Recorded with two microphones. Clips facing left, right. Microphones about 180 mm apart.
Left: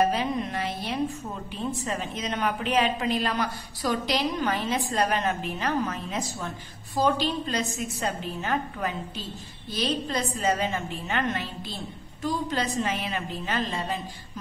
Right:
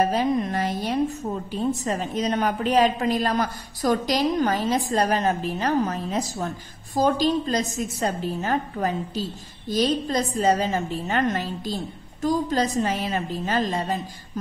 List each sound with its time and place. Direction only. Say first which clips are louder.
0.0 s a woman's voice: right 3 dB; 40° right (ahead or behind)